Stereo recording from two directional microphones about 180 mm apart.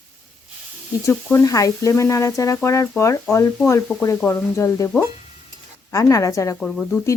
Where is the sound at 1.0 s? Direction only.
15° left (ahead or behind).